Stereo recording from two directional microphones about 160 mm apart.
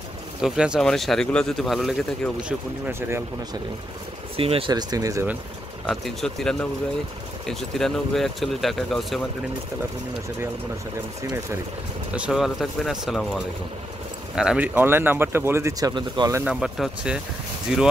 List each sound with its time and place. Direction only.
0.4 s speech: 5° right (ahead or behind)
2.9 s speech: 15° right (ahead or behind)
4.4 s speech: 35° right (ahead or behind)
5.9 s speech: centre (ahead or behind)
12.1 s speech: 5° right (ahead or behind)
15.9 s speech: 30° right (ahead or behind)
16.4 s speech: centre (ahead or behind)